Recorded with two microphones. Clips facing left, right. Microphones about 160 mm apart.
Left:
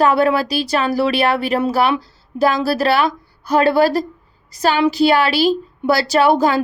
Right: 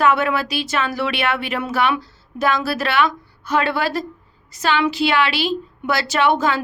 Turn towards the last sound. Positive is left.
turn(degrees=35)  # may be behind; listen again after turning